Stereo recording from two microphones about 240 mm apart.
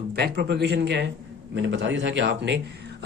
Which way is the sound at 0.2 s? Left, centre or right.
Right.